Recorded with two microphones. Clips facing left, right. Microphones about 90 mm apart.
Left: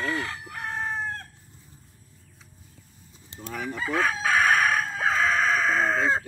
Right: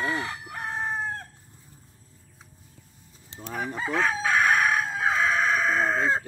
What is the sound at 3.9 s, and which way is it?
Chicken, centre (ahead or behind).